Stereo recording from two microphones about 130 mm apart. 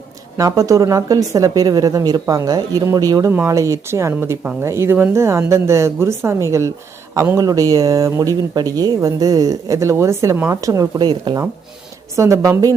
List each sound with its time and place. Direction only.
0.3 s speech: 25° right (ahead or behind)
12.1 s speech: 25° right (ahead or behind)